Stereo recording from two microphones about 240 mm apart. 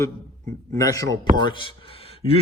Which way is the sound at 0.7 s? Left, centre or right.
Centre.